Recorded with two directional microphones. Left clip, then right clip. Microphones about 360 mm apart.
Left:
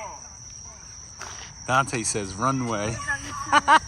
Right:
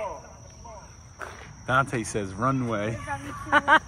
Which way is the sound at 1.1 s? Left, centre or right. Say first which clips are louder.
Even; centre.